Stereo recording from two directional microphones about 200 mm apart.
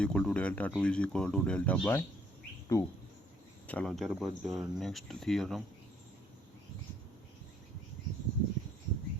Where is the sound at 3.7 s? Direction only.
5° left (ahead or behind).